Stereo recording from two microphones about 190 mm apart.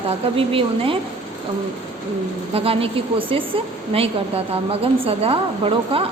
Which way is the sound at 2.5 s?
30° right (ahead or behind).